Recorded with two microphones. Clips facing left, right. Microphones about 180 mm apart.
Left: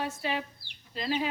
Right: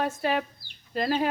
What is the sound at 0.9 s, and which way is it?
Speech, 50° right (ahead or behind).